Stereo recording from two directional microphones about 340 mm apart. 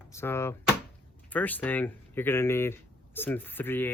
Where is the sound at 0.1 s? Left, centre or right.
Centre.